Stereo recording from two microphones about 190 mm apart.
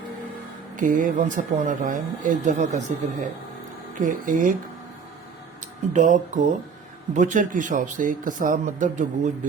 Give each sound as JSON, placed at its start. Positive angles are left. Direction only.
{"t": 0.8, "sound": "speech", "side_deg": -45}
{"t": 5.9, "sound": "speech", "side_deg": -40}